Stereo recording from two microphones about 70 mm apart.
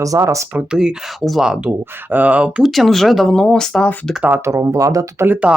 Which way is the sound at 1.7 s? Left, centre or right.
Right.